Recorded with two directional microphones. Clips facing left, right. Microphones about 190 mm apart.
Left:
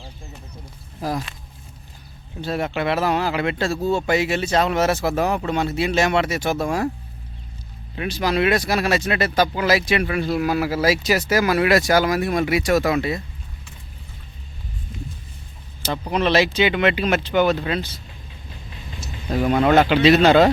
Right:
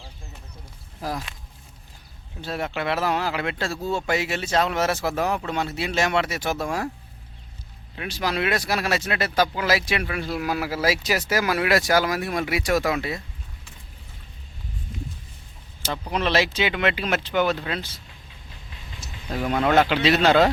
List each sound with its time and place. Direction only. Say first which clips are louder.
2.4 s speech: left 4 dB; centre (ahead or behind)
8.0 s speech: left 5 dB; 5° right (ahead or behind)
16.0 s speech: left 4 dB; 5° left (ahead or behind)
17.5 s speech: left 5 dB; 10° left (ahead or behind)
17.7 s speech: left 6 dB; 5° right (ahead or behind)
19.3 s a man's voice: left 4 dB; 15° left (ahead or behind)